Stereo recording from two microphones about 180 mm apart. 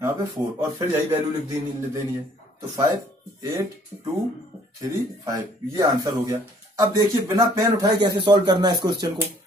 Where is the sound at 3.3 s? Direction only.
20° right (ahead or behind).